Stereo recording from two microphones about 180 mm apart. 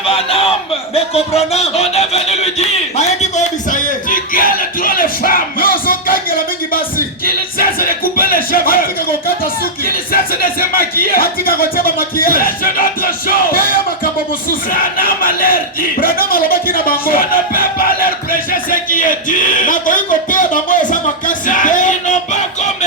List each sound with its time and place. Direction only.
0.1 s speech: 30° left (ahead or behind)
0.9 s music: 35° left (ahead or behind); by 6.1 s 50° left (ahead or behind)
7.6 s music: 55° left (ahead or behind)
14.7 s a man's voice: 50° left (ahead or behind)
21.2 s music: 45° left (ahead or behind)